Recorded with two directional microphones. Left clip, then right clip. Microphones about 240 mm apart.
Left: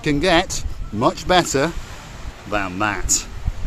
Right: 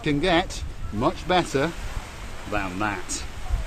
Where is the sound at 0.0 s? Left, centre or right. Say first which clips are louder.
Left 5 dB; left.